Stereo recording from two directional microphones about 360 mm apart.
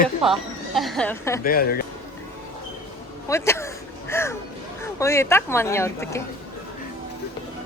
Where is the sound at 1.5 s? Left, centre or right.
Left.